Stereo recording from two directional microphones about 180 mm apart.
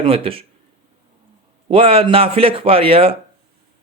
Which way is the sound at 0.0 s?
30° right (ahead or behind).